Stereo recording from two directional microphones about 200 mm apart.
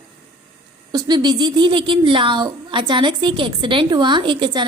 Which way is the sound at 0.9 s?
20° right (ahead or behind).